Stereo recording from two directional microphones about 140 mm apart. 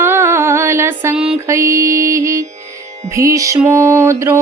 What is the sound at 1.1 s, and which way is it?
Music, 5° right (ahead or behind).